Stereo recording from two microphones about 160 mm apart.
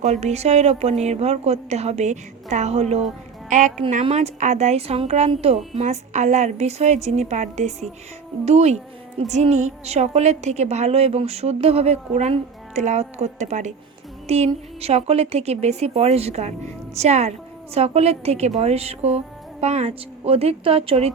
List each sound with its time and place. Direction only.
0.0 s a woman's voice: 45° right (ahead or behind)